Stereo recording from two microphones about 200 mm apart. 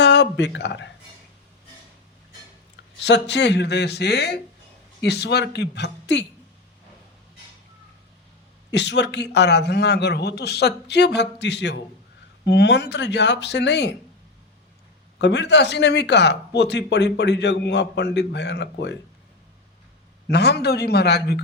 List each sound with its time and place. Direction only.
0.0 s speech: 60° left (ahead or behind)
3.0 s a man's voice: 60° left (ahead or behind)
8.7 s a man's voice: 60° left (ahead or behind)
15.2 s a man's voice: 60° left (ahead or behind)
20.2 s a man's voice: 55° left (ahead or behind)